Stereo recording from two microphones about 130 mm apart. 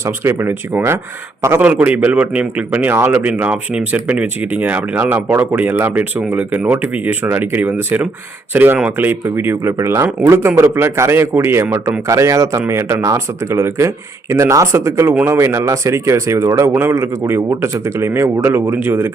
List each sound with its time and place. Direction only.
0.0 s a man's voice: 20° right (ahead or behind)
15.1 s speech: 10° right (ahead or behind)
15.4 s speech: 20° right (ahead or behind)